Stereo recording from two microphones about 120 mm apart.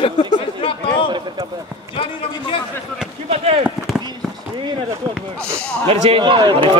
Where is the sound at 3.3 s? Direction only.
60° right (ahead or behind).